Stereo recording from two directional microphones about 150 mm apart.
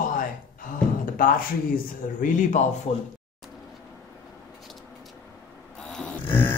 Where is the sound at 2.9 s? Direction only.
45° left (ahead or behind).